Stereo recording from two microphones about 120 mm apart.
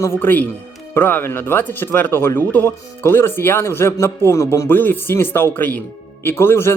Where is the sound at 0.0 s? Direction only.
15° left (ahead or behind).